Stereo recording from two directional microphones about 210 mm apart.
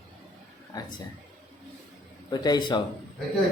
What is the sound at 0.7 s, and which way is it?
Speech, 15° left (ahead or behind).